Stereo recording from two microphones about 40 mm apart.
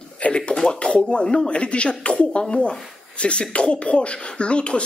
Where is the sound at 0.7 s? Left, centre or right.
Left.